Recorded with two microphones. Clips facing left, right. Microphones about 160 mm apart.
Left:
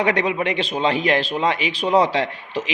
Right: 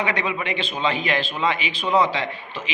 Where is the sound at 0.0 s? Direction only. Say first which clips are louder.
Left 5 dB; 40° left (ahead or behind).